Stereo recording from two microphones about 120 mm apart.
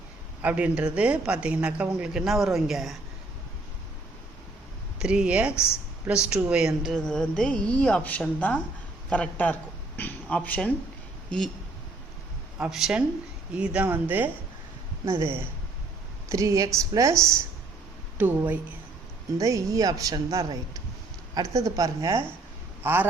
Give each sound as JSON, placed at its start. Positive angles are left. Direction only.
{"t": 0.4, "sound": "a man's voice", "side_deg": -10}
{"t": 4.9, "sound": "a man's voice", "side_deg": -10}
{"t": 12.5, "sound": "a man's voice", "side_deg": -5}
{"t": 18.2, "sound": "a man's voice", "side_deg": -15}
{"t": 19.4, "sound": "a woman's voice", "side_deg": -25}
{"t": 22.8, "sound": "a man's voice", "side_deg": -15}